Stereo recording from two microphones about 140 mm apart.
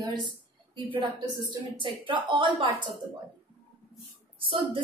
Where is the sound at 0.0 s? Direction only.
30° right (ahead or behind).